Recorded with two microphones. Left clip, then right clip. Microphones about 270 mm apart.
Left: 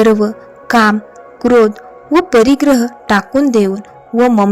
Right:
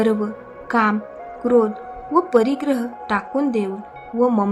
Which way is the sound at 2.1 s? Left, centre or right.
Left.